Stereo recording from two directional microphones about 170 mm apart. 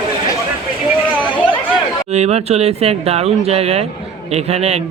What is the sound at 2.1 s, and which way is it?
Speech, 40° right (ahead or behind).